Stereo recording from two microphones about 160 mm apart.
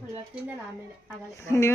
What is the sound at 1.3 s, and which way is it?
Speech, 15° left (ahead or behind).